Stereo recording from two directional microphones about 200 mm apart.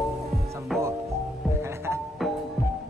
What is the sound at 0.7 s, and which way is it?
Music, centre (ahead or behind).